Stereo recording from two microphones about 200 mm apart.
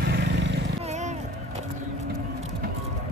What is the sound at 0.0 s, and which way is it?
Vehicle, 55° right (ahead or behind).